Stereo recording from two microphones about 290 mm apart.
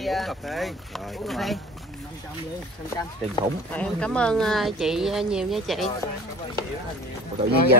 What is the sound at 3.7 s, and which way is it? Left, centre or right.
Speech, centre.